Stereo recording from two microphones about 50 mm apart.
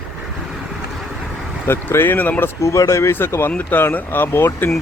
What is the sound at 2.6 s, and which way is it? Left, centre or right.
Speech, left.